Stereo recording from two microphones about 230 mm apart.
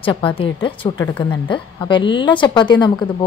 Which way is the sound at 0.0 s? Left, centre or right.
Left.